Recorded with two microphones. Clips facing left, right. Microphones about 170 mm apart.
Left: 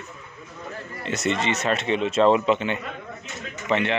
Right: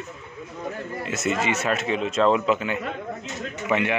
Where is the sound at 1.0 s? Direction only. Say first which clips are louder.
Left 1 dB; 5° right (ahead or behind).